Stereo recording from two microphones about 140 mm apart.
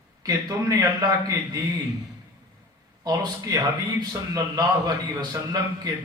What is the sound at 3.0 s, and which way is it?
A man's voice, 30° right (ahead or behind).